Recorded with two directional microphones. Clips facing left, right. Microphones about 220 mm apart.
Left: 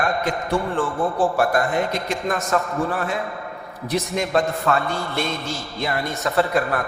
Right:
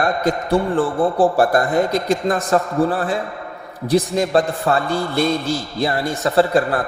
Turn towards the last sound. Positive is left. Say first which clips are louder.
# right 5 dB
turn(degrees=-30)  # may be behind; listen again after turning